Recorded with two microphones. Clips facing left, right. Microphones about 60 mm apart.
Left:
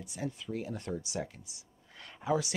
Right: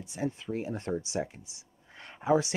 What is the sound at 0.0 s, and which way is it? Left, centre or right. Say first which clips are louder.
Speech: right 5 dB; right.